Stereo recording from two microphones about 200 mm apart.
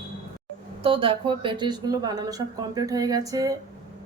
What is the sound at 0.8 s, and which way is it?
A woman's voice, 25° right (ahead or behind).